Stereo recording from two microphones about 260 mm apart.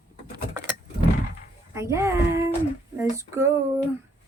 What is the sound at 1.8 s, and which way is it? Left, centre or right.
Speech, centre.